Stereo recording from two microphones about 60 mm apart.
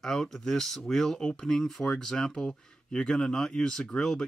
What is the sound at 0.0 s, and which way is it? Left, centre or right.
Speech, centre.